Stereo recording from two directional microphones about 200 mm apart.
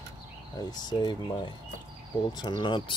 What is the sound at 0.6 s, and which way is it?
Speech, 20° left (ahead or behind).